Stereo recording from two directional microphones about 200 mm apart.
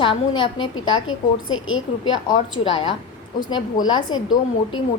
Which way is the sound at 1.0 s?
80° left.